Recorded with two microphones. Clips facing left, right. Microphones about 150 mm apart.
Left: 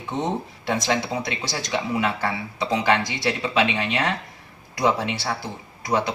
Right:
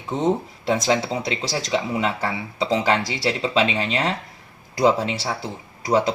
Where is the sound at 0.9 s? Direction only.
30° right (ahead or behind).